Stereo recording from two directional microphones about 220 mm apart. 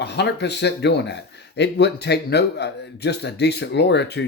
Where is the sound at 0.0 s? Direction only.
50° left (ahead or behind).